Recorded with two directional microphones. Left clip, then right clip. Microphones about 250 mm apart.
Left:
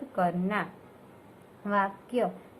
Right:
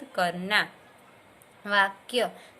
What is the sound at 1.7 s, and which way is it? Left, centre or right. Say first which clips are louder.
Speech: right 4 dB; right.